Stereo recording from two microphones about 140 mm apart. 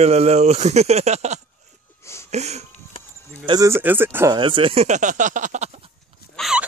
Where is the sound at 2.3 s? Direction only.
50° right (ahead or behind).